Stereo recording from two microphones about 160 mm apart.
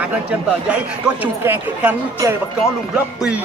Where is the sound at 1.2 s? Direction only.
10° right (ahead or behind).